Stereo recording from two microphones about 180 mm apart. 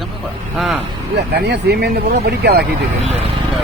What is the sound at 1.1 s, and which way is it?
Speech, 65° right (ahead or behind).